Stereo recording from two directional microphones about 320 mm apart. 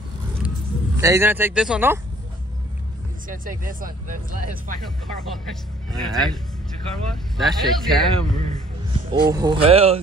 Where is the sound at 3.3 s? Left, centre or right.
Right.